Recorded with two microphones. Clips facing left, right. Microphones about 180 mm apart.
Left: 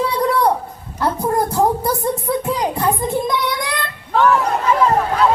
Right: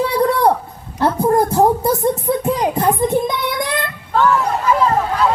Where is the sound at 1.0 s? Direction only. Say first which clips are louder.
Right 4 dB; 25° right (ahead or behind).